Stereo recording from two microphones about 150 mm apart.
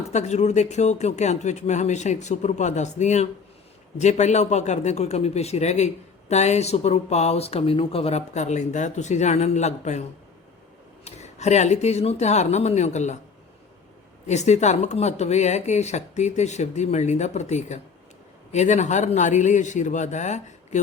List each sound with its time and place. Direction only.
0.1 s a man's voice: 50° left (ahead or behind)
14.3 s a man's voice: 50° left (ahead or behind)